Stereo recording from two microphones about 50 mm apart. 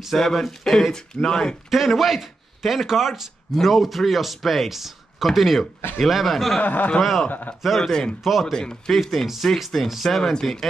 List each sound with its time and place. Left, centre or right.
0.2 s speech: centre
1.7 s speech: centre
6.6 s speech: left
7.0 s speech: centre
7.2 s speech: left
7.6 s speech: centre
7.9 s speech: centre
8.2 s speech: centre
8.5 s speech: centre
8.9 s speech: centre